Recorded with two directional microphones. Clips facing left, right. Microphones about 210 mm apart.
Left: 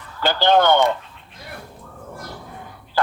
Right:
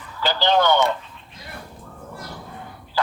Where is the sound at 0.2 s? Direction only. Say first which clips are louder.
Left 3 dB; 55° left (ahead or behind).